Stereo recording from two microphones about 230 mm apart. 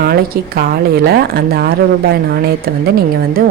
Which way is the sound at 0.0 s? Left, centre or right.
Right.